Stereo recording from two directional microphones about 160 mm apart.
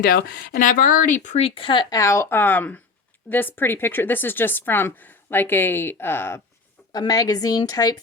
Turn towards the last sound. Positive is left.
turn(degrees=25)  # may be behind; listen again after turning